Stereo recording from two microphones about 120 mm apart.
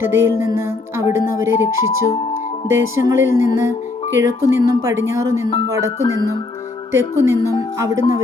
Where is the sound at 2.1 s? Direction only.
45° left (ahead or behind).